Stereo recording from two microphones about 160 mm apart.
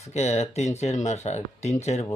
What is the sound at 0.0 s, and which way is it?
Speech, 45° left (ahead or behind).